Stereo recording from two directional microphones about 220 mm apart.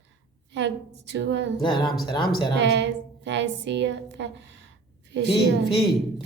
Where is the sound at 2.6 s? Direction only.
55° right (ahead or behind).